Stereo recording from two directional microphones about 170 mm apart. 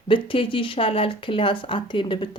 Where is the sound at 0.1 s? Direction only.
30° left (ahead or behind).